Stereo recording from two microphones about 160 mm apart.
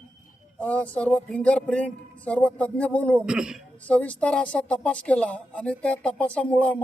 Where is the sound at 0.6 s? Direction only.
10° left (ahead or behind).